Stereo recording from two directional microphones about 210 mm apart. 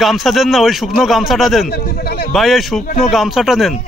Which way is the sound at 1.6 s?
45° left (ahead or behind).